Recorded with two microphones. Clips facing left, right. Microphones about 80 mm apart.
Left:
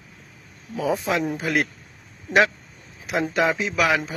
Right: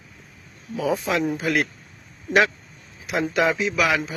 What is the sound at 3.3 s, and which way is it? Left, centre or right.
Speech, left.